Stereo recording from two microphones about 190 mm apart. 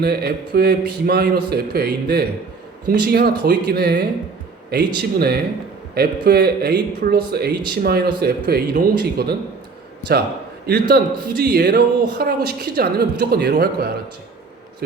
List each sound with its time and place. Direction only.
0.0 s a man's voice: 55° right (ahead or behind)
10.7 s a man's voice: 55° right (ahead or behind)